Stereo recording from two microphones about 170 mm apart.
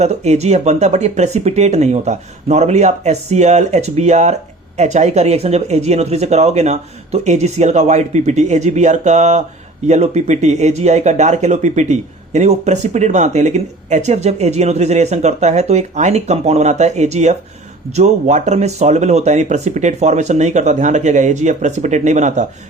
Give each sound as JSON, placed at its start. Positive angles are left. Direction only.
{"t": 0.0, "sound": "speech", "side_deg": -40}